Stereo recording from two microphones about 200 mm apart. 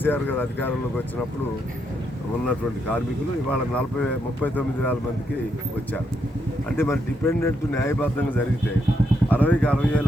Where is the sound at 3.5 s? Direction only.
5° left (ahead or behind).